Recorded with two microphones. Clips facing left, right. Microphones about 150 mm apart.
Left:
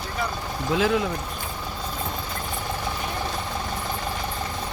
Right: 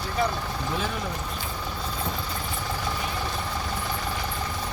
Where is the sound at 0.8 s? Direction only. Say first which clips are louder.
Left 13 dB; 90° left.